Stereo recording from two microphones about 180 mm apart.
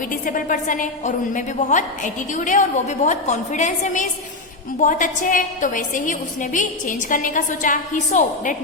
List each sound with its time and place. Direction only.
0.1 s a woman's voice: 50° left (ahead or behind)